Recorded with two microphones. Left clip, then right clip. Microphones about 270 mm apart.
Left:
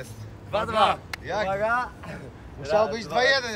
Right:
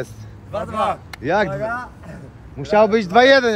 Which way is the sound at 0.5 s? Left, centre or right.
Centre.